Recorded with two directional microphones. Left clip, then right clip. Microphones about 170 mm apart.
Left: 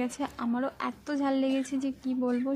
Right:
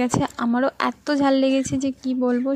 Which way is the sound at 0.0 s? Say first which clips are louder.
Right 10 dB; 40° right (ahead or behind).